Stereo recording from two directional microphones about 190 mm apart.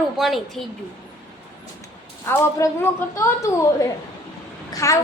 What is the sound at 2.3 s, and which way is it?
A woman's voice, 10° left (ahead or behind).